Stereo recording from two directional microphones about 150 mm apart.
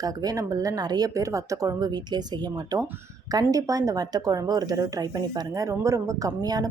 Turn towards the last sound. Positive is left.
turn(degrees=-25)  # may be behind; listen again after turning